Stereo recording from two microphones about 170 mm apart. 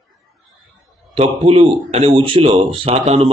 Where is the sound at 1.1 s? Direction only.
35° right (ahead or behind).